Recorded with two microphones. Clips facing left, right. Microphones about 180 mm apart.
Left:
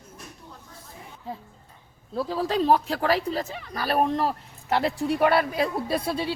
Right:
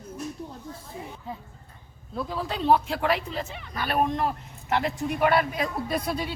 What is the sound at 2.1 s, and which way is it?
Speech, 35° left (ahead or behind).